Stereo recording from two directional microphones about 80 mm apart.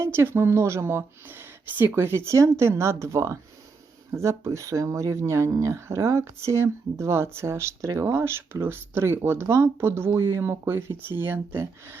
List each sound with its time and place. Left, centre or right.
0.0 s speech: right